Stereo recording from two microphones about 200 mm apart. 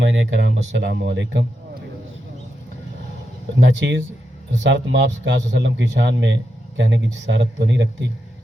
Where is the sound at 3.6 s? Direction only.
65° right (ahead or behind).